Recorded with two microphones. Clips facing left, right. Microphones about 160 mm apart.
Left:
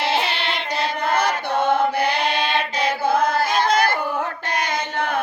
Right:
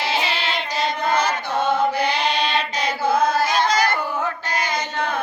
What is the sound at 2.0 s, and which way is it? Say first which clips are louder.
Music: even; 55° left (ahead or behind).